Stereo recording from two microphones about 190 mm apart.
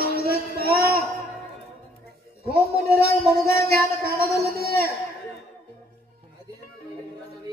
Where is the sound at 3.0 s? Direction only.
55° right (ahead or behind).